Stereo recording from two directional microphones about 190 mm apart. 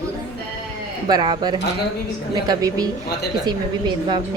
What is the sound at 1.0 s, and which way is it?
A child's voice, 20° right (ahead or behind).